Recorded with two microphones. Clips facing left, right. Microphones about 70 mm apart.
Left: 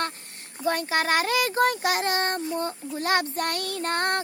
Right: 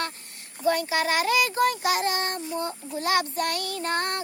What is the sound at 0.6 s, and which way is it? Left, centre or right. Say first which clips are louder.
Child singing: right 1 dB; left.